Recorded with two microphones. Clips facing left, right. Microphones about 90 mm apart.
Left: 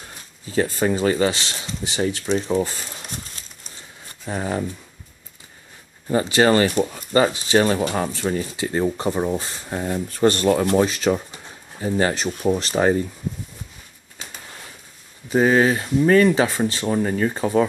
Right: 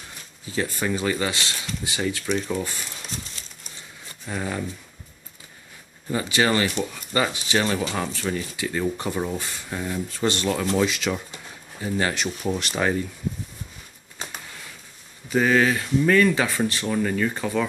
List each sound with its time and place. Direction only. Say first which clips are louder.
0.5 s speech: left 5 dB; 35° left (ahead or behind)
4.3 s speech: left 4 dB; 35° left (ahead or behind)
6.0 s speech: left 5 dB; 35° left (ahead or behind)
15.2 s speech: left 3 dB; 30° left (ahead or behind)